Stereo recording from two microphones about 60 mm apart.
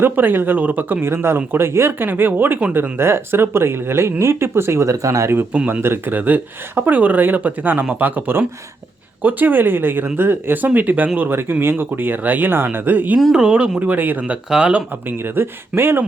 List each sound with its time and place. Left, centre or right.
0.0 s speech: right
5.8 s speech: right
6.1 s speech: right
13.3 s speech: centre
15.2 s speech: right